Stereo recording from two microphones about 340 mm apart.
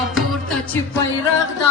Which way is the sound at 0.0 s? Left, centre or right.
Centre.